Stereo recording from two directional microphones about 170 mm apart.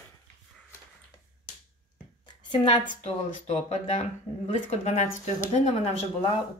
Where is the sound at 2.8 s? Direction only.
40° left (ahead or behind).